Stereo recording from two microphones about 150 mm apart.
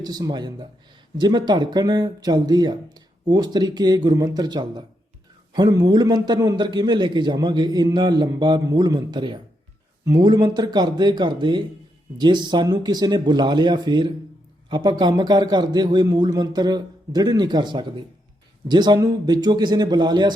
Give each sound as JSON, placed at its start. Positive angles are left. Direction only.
{"t": 0.0, "sound": "a man's voice", "side_deg": -25}